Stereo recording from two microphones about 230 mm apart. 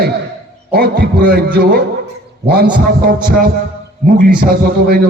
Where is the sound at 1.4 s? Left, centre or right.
Right.